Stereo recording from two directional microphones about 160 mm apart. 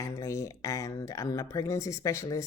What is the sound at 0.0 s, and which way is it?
Speech, 20° left (ahead or behind).